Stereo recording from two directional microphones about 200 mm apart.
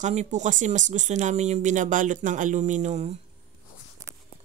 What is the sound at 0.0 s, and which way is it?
Speech, 35° right (ahead or behind).